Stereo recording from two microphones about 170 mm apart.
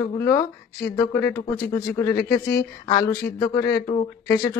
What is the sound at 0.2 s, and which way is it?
Speech, 15° left (ahead or behind).